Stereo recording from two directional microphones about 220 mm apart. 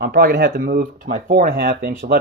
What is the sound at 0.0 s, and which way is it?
Speech, 45° right (ahead or behind).